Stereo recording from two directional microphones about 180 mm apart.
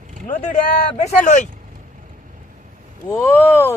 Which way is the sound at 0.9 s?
45° left (ahead or behind).